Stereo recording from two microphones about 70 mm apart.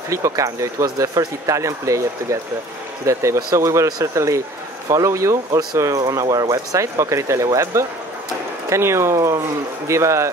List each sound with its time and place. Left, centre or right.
0.1 s speech: right
3.1 s speech: right
5.5 s speech: right
5.8 s speech: right